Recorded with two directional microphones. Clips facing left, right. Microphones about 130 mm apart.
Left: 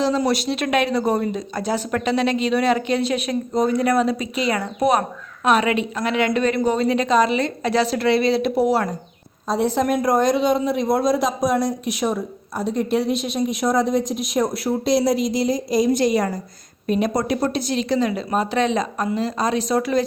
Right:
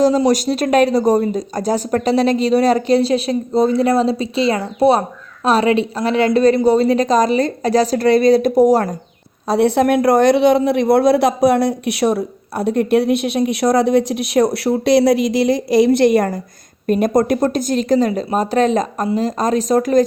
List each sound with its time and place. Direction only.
0.3 s speech: 40° right (ahead or behind)
9.5 s speech: 70° right (ahead or behind); by 20.1 s 45° right (ahead or behind)